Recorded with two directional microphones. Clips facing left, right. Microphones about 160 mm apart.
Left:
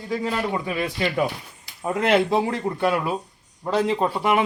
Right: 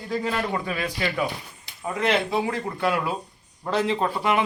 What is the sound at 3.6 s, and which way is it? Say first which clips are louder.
Speech: left 2 dB; 10° left (ahead or behind).